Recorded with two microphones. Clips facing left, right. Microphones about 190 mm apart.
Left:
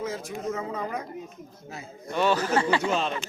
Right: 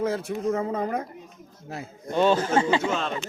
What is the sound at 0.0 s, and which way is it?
Speech, 60° right (ahead or behind).